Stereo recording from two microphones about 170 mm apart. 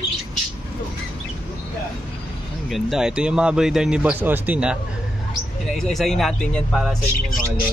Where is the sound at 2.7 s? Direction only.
5° right (ahead or behind).